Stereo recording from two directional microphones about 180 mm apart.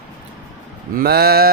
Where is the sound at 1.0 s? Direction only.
60° right (ahead or behind).